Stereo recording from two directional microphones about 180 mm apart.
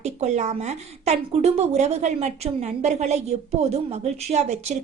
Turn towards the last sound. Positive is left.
turn(degrees=-40)  # may be behind; listen again after turning